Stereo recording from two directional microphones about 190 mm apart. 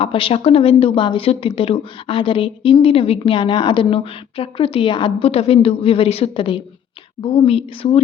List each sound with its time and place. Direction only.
0.0 s a woman's voice: 30° left (ahead or behind)